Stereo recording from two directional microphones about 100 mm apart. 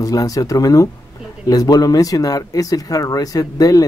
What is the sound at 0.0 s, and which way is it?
Speech, 35° left (ahead or behind).